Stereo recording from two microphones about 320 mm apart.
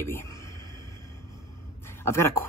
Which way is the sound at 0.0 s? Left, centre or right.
Centre.